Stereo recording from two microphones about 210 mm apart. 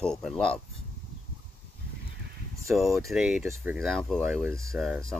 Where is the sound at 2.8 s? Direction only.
Centre (ahead or behind).